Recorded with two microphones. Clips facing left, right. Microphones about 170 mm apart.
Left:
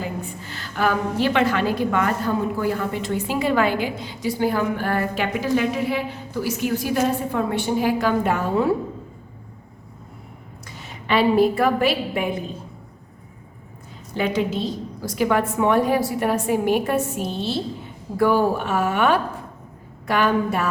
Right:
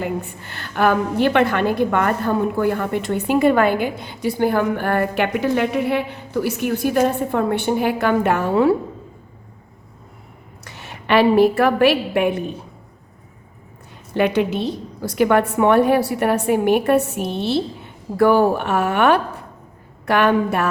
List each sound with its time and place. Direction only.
0.0 s a woman's voice: 60° right (ahead or behind)
10.6 s a woman's voice: 70° right (ahead or behind)
14.1 s a woman's voice: 65° right (ahead or behind)